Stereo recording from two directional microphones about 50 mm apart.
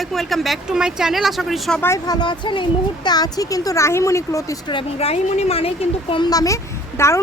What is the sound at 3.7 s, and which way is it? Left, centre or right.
Speech, left.